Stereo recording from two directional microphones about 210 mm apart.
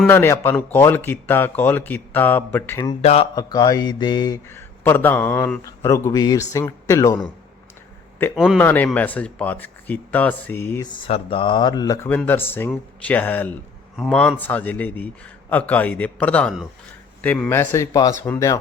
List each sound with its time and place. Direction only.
0.1 s speech: 10° left (ahead or behind)
3.0 s speech: 30° left (ahead or behind)
3.3 s speech: 20° left (ahead or behind)
8.2 s speech: 10° left (ahead or behind)